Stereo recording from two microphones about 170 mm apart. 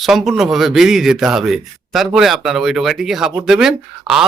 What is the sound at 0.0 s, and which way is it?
Speech, centre (ahead or behind).